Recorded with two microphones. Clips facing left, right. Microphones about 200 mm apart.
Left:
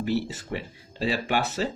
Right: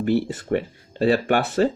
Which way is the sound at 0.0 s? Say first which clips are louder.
Right 6 dB; 55° right (ahead or behind).